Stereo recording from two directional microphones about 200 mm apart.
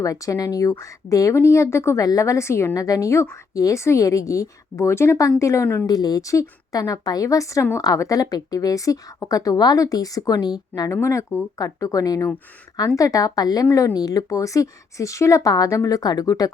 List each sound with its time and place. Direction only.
0.0 s a woman's voice: 15° left (ahead or behind)